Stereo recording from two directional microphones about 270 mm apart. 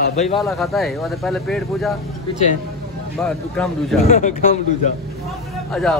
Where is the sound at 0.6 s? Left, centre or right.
Centre.